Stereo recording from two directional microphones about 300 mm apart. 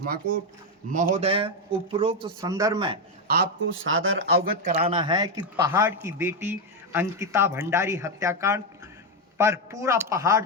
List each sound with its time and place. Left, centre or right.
1.1 s speech: centre
3.2 s speech: right
4.4 s speech: centre